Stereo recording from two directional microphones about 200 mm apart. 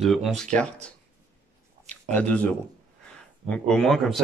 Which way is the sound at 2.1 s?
5° left (ahead or behind).